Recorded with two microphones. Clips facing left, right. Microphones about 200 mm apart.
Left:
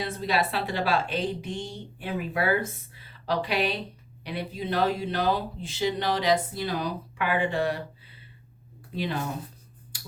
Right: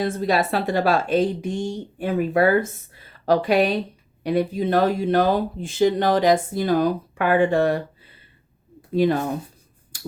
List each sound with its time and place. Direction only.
0.0 s a woman's voice: 45° right (ahead or behind)
9.9 s clicking: 45° right (ahead or behind)